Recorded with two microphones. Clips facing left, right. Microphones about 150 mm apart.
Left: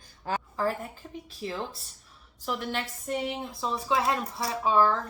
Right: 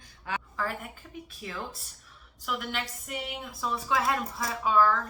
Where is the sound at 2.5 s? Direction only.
35° left (ahead or behind).